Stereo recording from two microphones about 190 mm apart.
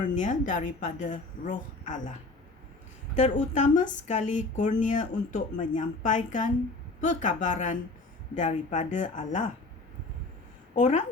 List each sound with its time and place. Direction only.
0.1 s speech: 40° left (ahead or behind)
3.2 s speech: 40° left (ahead or behind)
10.8 s speech: 40° left (ahead or behind)